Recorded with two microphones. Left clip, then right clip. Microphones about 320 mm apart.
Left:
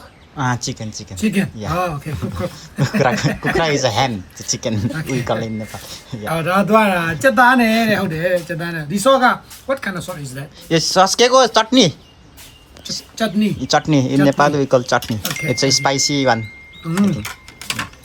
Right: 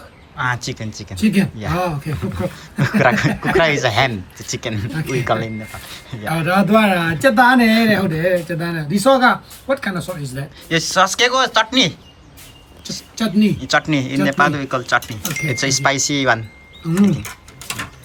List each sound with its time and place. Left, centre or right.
0.3 s speech: centre
1.1 s a man's voice: centre
2.6 s speech: centre
6.2 s a man's voice: centre
10.7 s speech: centre
13.1 s a man's voice: centre
13.6 s speech: centre
15.0 s a man's voice: centre
15.4 s speech: centre
16.8 s a man's voice: centre